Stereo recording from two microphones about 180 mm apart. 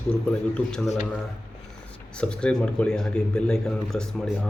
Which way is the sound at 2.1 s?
5° left (ahead or behind).